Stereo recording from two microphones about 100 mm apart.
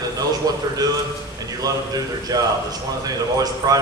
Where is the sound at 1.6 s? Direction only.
40° right (ahead or behind).